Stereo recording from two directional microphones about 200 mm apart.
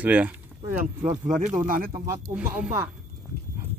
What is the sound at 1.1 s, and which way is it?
Speech, 40° right (ahead or behind).